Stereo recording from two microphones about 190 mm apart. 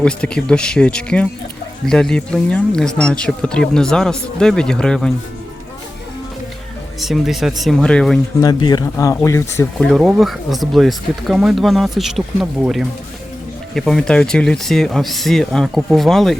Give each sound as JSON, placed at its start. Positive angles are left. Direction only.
{"t": 0.0, "sound": "speech", "side_deg": 5}
{"t": 7.0, "sound": "speech", "side_deg": 0}
{"t": 8.4, "sound": "speech", "side_deg": 20}
{"t": 9.7, "sound": "speech", "side_deg": 0}